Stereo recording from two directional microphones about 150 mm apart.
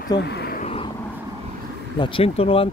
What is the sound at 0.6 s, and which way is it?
Vehicle, 40° left (ahead or behind).